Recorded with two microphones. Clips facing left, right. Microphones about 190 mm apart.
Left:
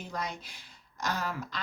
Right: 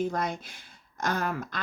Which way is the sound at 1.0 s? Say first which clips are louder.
Right 4 dB; 55° right (ahead or behind).